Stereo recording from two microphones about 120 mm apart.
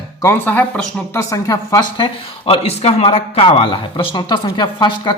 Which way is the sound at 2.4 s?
55° left (ahead or behind).